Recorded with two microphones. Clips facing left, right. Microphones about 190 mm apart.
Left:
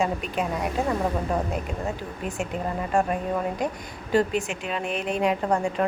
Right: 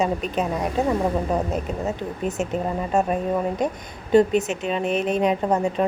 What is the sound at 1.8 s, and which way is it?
A woman's voice, 20° right (ahead or behind).